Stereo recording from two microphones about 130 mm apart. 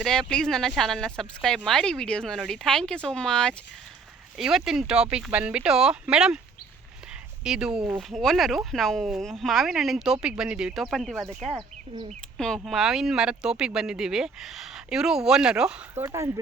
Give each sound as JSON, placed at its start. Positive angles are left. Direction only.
{"t": 0.0, "sound": "speech", "side_deg": 5}
{"t": 7.4, "sound": "speech", "side_deg": -5}
{"t": 12.6, "sound": "speech", "side_deg": 0}
{"t": 16.0, "sound": "speech", "side_deg": -25}